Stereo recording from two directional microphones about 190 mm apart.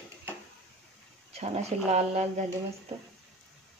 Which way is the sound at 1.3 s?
35° right (ahead or behind).